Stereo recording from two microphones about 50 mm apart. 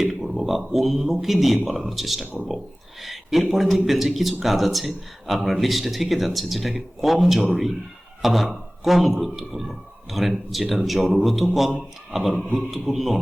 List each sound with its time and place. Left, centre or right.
0.0 s speech: centre
2.2 s speech: right
3.0 s speech: centre
12.5 s speech: centre